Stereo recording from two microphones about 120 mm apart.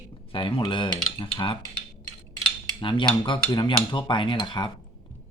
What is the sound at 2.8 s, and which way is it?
Cutlery, 40° left (ahead or behind).